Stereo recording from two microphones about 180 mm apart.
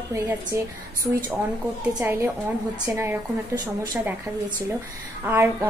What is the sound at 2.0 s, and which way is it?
A woman's voice, 15° right (ahead or behind).